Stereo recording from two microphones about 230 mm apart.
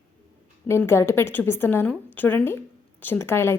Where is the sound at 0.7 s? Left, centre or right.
Centre.